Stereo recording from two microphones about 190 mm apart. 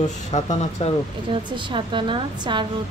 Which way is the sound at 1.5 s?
25° right (ahead or behind).